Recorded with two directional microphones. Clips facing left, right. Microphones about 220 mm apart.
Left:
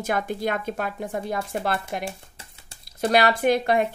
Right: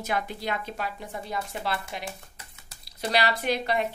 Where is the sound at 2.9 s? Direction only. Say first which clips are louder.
Left 6 dB; 50° left (ahead or behind).